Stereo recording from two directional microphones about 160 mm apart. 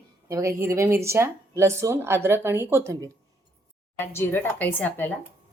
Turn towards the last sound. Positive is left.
turn(degrees=10)  # may be behind; listen again after turning